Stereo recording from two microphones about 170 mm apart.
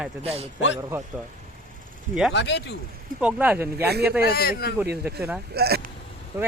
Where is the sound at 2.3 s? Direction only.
90° left.